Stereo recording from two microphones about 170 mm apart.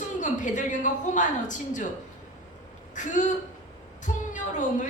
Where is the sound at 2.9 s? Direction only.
50° left (ahead or behind).